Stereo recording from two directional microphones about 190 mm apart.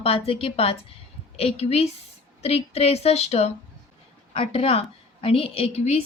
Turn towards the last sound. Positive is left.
turn(degrees=30)  # may be behind; listen again after turning